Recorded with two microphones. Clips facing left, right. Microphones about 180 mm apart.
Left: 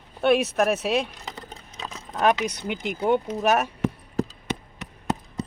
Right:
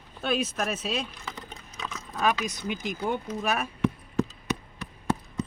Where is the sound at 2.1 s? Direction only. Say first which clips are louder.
Left 5 dB; 60° left (ahead or behind).